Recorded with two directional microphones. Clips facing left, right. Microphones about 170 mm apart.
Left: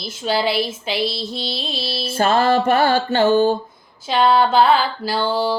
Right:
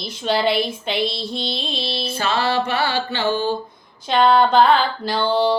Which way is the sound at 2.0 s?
50° left (ahead or behind).